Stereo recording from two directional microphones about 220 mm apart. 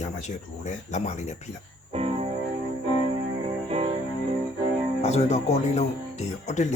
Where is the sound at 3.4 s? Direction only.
30° right (ahead or behind).